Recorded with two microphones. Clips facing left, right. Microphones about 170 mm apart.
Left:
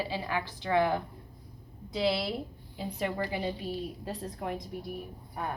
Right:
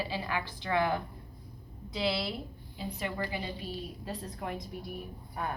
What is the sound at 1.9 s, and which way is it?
Speech, 45° left (ahead or behind).